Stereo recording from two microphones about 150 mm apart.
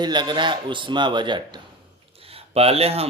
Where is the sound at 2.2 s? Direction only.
40° right (ahead or behind).